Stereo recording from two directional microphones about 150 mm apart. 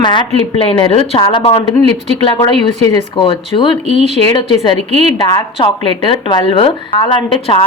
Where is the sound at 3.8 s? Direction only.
50° right (ahead or behind).